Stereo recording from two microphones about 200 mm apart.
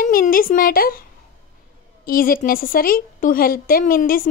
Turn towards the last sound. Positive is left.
turn(degrees=45)  # may be behind; listen again after turning